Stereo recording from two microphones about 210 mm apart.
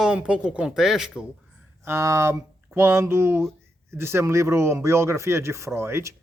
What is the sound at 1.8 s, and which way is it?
Speech, 15° right (ahead or behind).